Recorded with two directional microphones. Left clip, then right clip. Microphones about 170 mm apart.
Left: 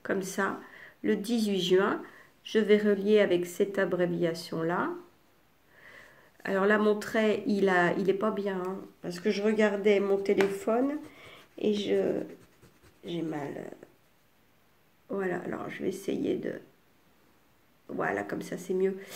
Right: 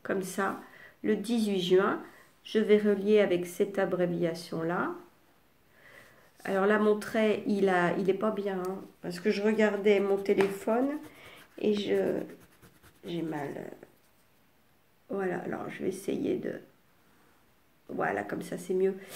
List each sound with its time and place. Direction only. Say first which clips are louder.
0.0 s speech: left 1 dB; 15° left (ahead or behind)
6.4 s speech: left 1 dB; 20° left (ahead or behind)
15.0 s speech: even; 15° left (ahead or behind)
17.8 s speech: even; 15° left (ahead or behind)